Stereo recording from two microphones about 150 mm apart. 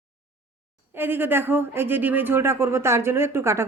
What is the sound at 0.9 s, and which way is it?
Speech, 15° right (ahead or behind).